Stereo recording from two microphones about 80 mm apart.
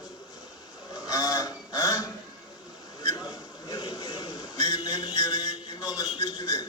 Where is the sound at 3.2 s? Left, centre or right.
Left.